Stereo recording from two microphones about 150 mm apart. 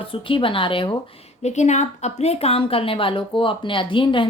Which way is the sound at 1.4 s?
50° left (ahead or behind).